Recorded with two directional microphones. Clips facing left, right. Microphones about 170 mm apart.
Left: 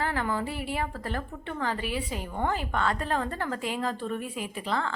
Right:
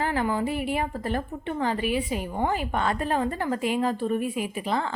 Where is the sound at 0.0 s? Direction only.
15° right (ahead or behind).